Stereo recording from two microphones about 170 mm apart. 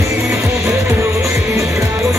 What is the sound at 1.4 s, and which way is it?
Music, centre (ahead or behind).